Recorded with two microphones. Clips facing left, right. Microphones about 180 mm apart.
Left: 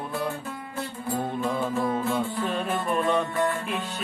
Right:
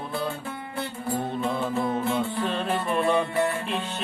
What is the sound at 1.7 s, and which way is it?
Music, 25° right (ahead or behind).